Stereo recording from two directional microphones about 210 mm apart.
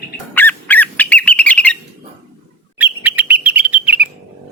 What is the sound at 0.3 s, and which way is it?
Bird, 10° left (ahead or behind).